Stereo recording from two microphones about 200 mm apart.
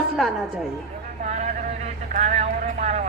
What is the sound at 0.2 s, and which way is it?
Speech, centre (ahead or behind).